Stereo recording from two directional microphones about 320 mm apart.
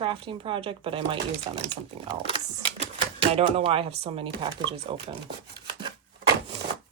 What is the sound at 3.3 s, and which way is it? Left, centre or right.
Speech, centre.